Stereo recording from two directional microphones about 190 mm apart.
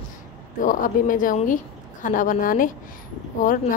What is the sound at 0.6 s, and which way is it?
A woman's voice, 45° left (ahead or behind).